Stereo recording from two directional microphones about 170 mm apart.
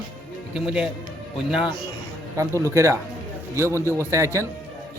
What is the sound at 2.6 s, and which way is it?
A man's voice, 15° right (ahead or behind).